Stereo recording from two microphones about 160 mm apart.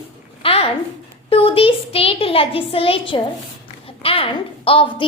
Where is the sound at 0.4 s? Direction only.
40° left (ahead or behind).